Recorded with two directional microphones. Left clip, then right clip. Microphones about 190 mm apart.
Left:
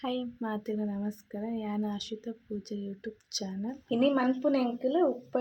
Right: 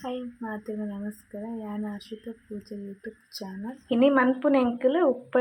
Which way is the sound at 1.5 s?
15° left (ahead or behind).